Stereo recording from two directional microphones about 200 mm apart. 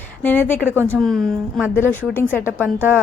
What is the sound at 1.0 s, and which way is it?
A woman's voice, centre (ahead or behind).